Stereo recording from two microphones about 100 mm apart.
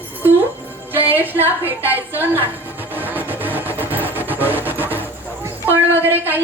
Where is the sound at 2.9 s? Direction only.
20° right (ahead or behind).